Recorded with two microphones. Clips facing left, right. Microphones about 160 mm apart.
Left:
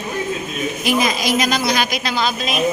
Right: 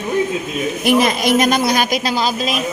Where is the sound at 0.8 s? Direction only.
60° right (ahead or behind); by 2.5 s 35° right (ahead or behind).